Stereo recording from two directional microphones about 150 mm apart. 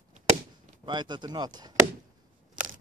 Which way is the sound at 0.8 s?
30° right (ahead or behind).